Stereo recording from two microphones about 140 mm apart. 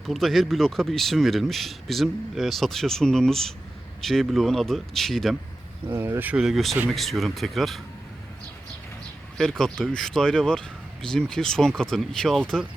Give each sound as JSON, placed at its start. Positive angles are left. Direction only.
{"t": 0.0, "sound": "speech", "side_deg": 0}
{"t": 5.9, "sound": "speech", "side_deg": -15}
{"t": 9.4, "sound": "speech", "side_deg": 5}